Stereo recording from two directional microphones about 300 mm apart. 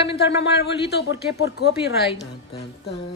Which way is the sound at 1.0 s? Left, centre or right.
Left.